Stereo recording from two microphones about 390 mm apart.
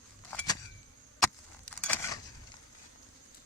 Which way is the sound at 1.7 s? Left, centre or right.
Centre.